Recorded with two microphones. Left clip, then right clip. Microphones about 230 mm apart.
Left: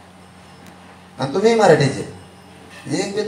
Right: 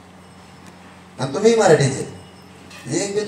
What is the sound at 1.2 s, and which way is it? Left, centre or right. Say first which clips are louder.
Speech: left 1 dB; left.